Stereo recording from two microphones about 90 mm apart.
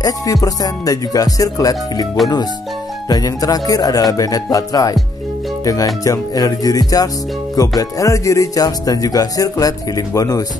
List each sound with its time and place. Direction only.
0.0 s speech: 40° left (ahead or behind)
3.1 s speech: 45° left (ahead or behind)
6.0 s speech: 40° left (ahead or behind)